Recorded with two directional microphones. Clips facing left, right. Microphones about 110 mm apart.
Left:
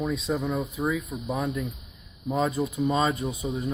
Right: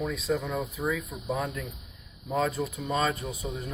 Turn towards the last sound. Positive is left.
turn(degrees=20)  # may be behind; listen again after turning